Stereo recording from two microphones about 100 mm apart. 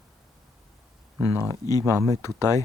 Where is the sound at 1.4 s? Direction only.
35° left (ahead or behind).